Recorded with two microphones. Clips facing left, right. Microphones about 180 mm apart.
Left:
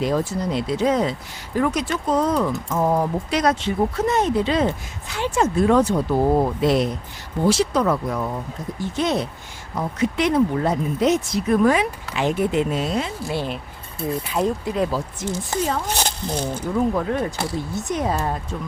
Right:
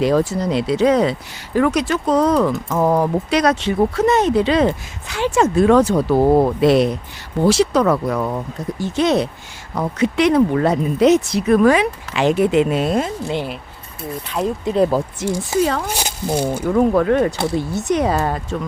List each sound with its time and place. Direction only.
0.0 s speech: 80° right; by 13.1 s 50° right (ahead or behind)
13.2 s speech: 20° right (ahead or behind)
14.2 s speech: 5° left (ahead or behind)
14.6 s speech: 25° right (ahead or behind)
15.2 s speech: 75° right (ahead or behind)
15.9 s speech: 10° right (ahead or behind)
16.6 s speech: 70° right (ahead or behind)